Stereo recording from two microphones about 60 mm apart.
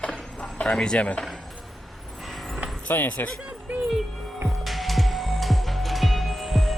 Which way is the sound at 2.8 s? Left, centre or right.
Left.